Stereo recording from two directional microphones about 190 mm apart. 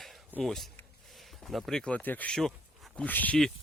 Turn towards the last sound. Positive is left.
turn(degrees=5)  # may be behind; listen again after turning